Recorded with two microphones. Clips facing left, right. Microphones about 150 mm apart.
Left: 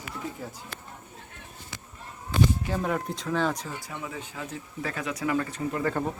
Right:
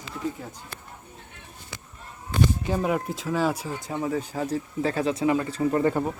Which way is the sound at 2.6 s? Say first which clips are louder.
Right 3 dB; 10° right (ahead or behind).